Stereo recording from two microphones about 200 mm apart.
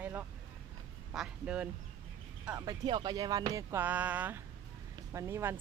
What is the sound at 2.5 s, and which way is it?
Speech, 20° right (ahead or behind).